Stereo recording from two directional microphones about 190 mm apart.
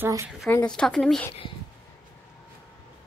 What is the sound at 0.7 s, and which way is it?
Speech, centre (ahead or behind).